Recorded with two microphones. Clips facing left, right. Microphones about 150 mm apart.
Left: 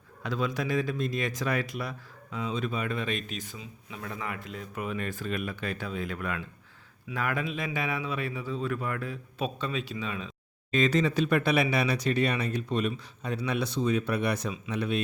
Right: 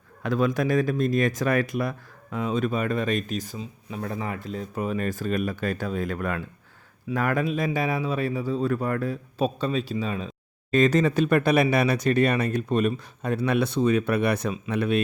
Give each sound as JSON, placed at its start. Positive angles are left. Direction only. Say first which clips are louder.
{"t": 0.2, "sound": "a man's voice", "louder": "right 7 dB", "side_deg": -50}